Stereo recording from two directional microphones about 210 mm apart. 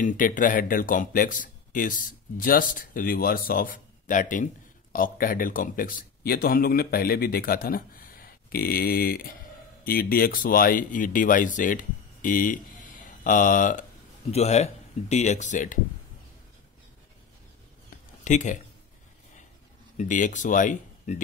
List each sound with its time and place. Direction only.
0.0 s speech: 40° left (ahead or behind)
18.2 s speech: 35° left (ahead or behind)
20.0 s speech: 35° left (ahead or behind)